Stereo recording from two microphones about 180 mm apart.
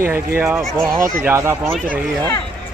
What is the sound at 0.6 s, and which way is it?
Speech, 5° left (ahead or behind).